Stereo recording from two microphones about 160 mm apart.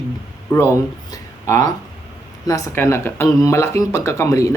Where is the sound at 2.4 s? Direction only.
20° left (ahead or behind).